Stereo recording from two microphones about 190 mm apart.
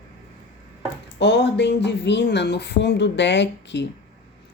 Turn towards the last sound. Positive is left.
turn(degrees=70)  # may be behind; listen again after turning